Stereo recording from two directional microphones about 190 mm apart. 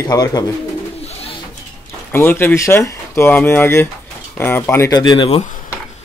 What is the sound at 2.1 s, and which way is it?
Cutlery, 10° left (ahead or behind).